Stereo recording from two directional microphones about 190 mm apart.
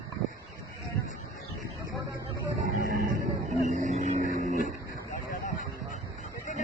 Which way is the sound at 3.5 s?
35° right (ahead or behind).